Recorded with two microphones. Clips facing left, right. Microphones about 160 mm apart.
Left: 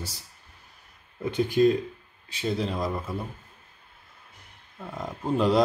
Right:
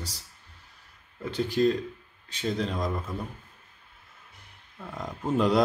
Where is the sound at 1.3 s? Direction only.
10° left (ahead or behind).